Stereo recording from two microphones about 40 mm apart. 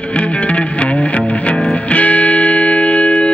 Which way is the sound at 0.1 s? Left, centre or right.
Left.